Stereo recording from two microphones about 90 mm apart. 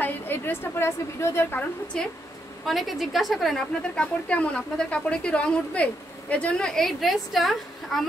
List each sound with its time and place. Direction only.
0.0 s a woman's voice: 25° left (ahead or behind)
1.9 s a woman's voice: 10° left (ahead or behind)
2.6 s a woman's voice: centre (ahead or behind)